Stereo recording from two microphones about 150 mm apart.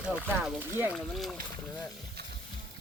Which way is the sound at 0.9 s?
Centre (ahead or behind).